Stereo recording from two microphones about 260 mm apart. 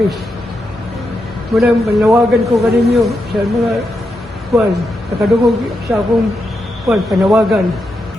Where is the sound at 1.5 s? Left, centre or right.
Centre.